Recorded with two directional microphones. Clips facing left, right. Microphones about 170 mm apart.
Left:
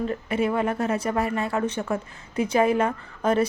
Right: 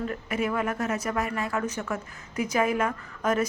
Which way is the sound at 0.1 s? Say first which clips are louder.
Left 4 dB; 30° left (ahead or behind).